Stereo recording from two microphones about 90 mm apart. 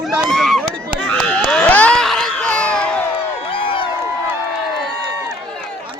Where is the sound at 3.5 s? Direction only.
65° left (ahead or behind).